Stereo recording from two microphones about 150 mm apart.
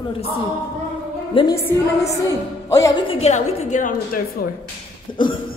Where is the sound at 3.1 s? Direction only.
50° left (ahead or behind).